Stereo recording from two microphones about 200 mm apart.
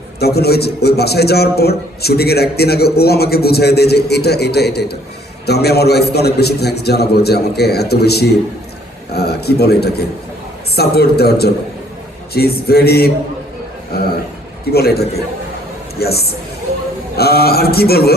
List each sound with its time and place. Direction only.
0.2 s a man's voice: 55° left (ahead or behind)